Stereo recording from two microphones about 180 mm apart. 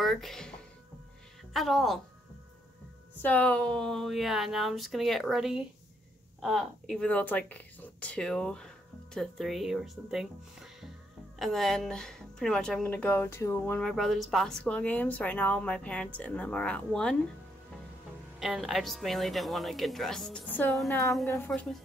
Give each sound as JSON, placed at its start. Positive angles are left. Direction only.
{"t": 0.0, "sound": "speech", "side_deg": 0}
{"t": 1.5, "sound": "speech", "side_deg": 0}
{"t": 3.2, "sound": "a woman's voice", "side_deg": 10}
{"t": 18.4, "sound": "speech", "side_deg": 0}
{"t": 20.9, "sound": "a woman's voice", "side_deg": 15}
{"t": 21.5, "sound": "speech", "side_deg": 5}